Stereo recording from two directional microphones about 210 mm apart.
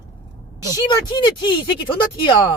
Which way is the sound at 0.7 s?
20° left (ahead or behind).